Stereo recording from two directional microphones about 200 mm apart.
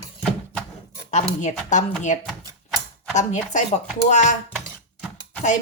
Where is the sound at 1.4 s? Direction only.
35° left (ahead or behind).